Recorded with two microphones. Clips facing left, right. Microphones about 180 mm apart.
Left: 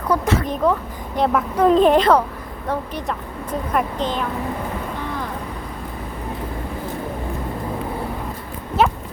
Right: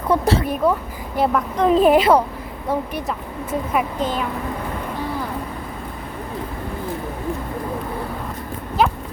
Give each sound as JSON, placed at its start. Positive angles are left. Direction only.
{"t": 0.1, "sound": "speech", "side_deg": -30}
{"t": 0.4, "sound": "a woman's voice", "side_deg": -10}